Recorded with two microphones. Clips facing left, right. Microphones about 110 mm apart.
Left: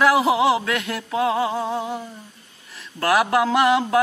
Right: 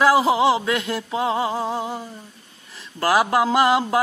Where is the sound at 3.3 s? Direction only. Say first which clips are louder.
Even; 5° right (ahead or behind).